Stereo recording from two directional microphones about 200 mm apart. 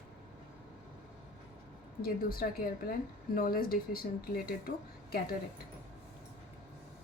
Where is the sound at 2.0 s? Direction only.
50° left (ahead or behind).